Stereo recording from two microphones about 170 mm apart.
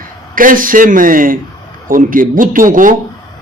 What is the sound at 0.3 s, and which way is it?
A man's voice, 55° right (ahead or behind).